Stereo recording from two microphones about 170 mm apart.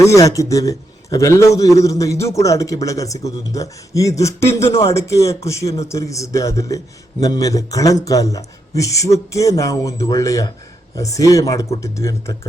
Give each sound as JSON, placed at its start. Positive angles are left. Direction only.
{"t": 0.0, "sound": "a man's voice", "side_deg": 20}